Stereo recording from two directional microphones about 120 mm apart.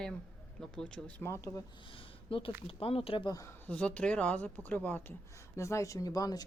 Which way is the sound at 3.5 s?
10° left (ahead or behind).